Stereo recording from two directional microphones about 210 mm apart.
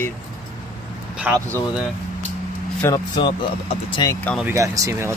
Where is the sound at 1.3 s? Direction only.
5° right (ahead or behind).